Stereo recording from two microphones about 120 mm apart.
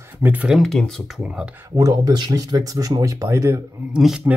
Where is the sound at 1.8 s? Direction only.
35° right (ahead or behind).